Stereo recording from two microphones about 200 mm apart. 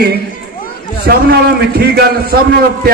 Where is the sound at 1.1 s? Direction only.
60° right (ahead or behind).